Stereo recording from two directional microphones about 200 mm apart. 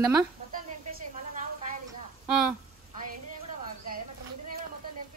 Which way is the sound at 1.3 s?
40° right (ahead or behind).